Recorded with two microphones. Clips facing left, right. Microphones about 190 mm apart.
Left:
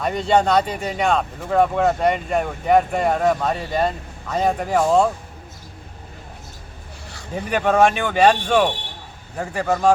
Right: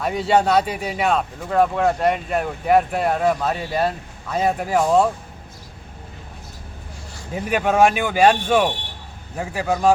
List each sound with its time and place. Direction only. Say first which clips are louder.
0.0 s speech: even; 5° right (ahead or behind)
7.3 s speech: even; 5° right (ahead or behind)